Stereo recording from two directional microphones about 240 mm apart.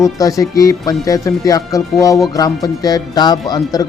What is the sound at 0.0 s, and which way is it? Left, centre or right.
Speech, centre.